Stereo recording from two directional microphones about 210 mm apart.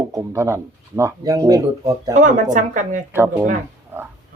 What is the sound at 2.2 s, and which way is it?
Speech, 35° right (ahead or behind).